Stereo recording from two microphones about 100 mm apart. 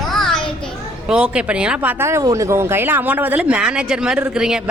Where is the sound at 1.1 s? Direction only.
10° right (ahead or behind).